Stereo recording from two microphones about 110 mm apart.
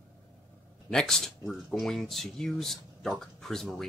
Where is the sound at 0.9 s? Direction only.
5° left (ahead or behind).